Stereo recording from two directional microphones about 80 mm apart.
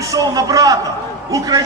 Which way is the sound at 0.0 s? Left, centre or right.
Right.